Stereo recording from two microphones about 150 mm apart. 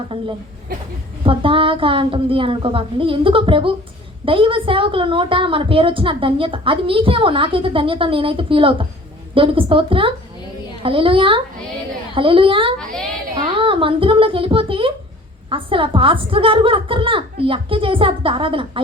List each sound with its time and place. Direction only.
0.1 s a woman's voice: 35° right (ahead or behind)
12.8 s a woman's voice: 5° left (ahead or behind)
13.3 s a woman's voice: 35° right (ahead or behind)